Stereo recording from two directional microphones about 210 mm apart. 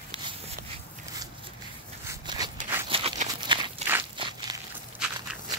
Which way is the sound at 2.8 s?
25° right (ahead or behind).